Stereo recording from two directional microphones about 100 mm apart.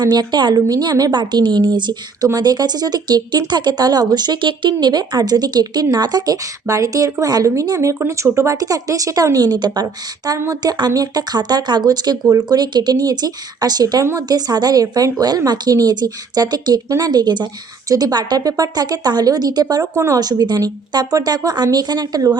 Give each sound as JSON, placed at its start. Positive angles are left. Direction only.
{"t": 0.0, "sound": "a woman's voice", "side_deg": -45}
{"t": 9.8, "sound": "speech", "side_deg": -30}
{"t": 14.0, "sound": "a woman's voice", "side_deg": -30}
{"t": 14.3, "sound": "speech", "side_deg": -40}
{"t": 19.9, "sound": "a woman's voice", "side_deg": -30}
{"t": 20.1, "sound": "speech", "side_deg": -40}